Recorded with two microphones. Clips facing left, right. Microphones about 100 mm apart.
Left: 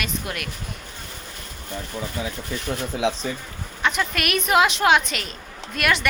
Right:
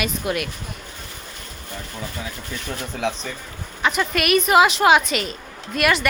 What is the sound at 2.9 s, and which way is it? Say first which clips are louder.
Speech: left 2 dB; 10° left (ahead or behind).